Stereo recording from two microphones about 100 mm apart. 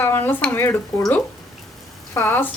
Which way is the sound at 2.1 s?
25° left (ahead or behind).